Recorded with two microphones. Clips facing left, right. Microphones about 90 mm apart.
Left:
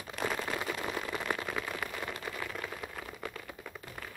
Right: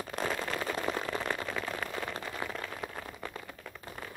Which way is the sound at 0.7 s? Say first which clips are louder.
Right 3 dB; 30° right (ahead or behind).